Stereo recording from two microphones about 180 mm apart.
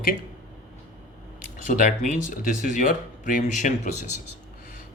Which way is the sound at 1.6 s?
50° left (ahead or behind).